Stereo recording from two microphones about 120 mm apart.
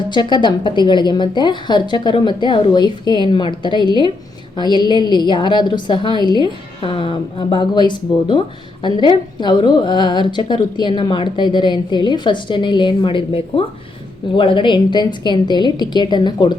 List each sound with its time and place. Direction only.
0.1 s a woman's voice: 40° left (ahead or behind)